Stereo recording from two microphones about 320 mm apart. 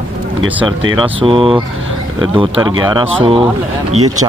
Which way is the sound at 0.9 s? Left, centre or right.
Centre.